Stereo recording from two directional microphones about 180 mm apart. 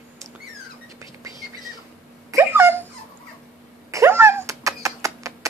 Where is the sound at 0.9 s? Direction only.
20° right (ahead or behind).